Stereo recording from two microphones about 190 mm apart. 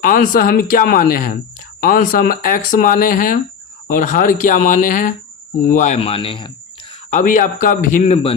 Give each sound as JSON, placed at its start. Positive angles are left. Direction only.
{"t": 0.0, "sound": "speech", "side_deg": 45}
{"t": 7.1, "sound": "speech", "side_deg": 40}